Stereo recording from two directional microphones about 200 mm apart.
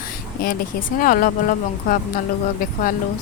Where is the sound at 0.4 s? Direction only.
45° left (ahead or behind).